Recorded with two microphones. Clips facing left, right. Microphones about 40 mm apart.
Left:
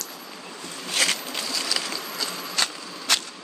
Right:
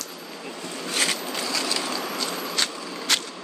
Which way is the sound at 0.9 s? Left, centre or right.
Left.